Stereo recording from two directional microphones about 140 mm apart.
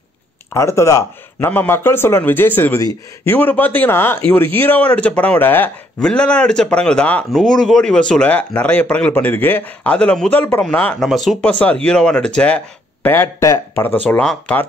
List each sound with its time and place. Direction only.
0.6 s speech: 20° left (ahead or behind)
11.1 s speech: centre (ahead or behind)